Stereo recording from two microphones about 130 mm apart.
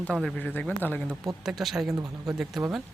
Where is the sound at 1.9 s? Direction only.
25° right (ahead or behind).